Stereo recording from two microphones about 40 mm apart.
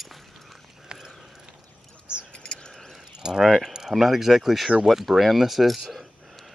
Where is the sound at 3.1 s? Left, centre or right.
Centre.